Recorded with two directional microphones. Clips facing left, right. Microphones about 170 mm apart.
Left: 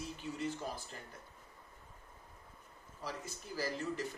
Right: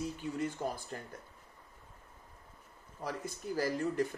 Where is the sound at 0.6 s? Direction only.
50° right (ahead or behind).